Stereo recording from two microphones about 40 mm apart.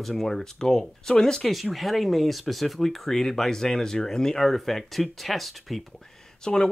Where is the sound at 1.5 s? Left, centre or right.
Centre.